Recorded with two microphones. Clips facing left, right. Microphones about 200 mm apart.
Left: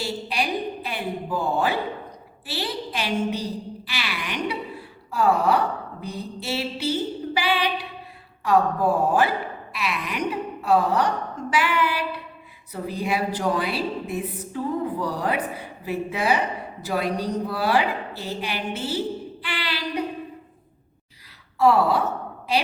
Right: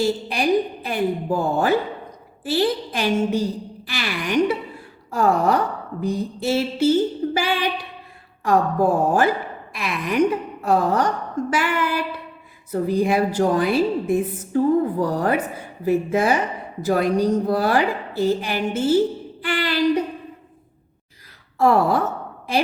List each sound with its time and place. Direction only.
0.0 s a woman's voice: 45° right (ahead or behind)
5.1 s gasp: 45° right (ahead or behind)
8.4 s a woman's voice: 45° right (ahead or behind)
21.6 s a woman's voice: 50° right (ahead or behind)